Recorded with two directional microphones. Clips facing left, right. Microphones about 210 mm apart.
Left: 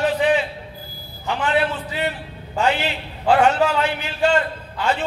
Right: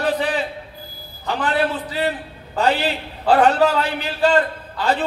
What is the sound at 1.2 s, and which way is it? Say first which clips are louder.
A man's voice: even; 35° right (ahead or behind).